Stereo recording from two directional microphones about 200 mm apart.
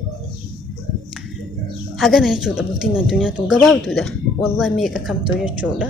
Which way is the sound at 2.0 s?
Centre (ahead or behind).